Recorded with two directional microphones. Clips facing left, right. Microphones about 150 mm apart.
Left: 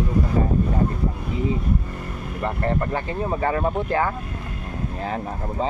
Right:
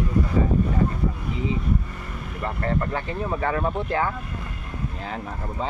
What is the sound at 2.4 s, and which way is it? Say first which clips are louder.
Speech: left 2 dB; 35° left (ahead or behind).